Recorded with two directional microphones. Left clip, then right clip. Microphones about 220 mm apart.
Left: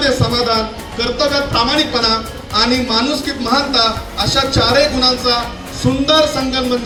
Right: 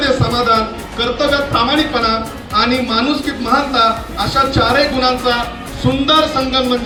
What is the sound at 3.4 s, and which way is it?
A man's voice, 20° left (ahead or behind).